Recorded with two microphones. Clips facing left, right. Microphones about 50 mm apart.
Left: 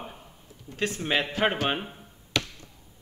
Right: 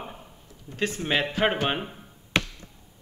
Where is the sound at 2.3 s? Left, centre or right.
Right.